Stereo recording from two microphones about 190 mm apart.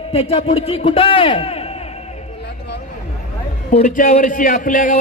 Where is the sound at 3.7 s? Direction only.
40° left (ahead or behind).